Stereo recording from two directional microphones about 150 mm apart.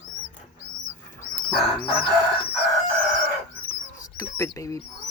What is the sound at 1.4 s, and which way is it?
Bird, centre (ahead or behind).